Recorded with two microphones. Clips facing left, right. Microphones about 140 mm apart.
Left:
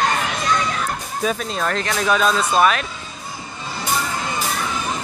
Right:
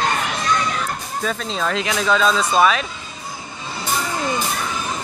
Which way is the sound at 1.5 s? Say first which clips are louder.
Even; 5° left (ahead or behind).